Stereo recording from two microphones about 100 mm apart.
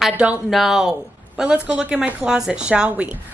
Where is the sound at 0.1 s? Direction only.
15° right (ahead or behind).